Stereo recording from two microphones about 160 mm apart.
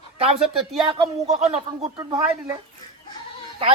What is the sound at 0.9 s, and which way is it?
Speech, 40° right (ahead or behind).